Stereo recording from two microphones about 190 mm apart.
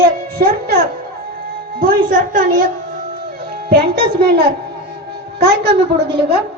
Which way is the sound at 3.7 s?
55° right (ahead or behind).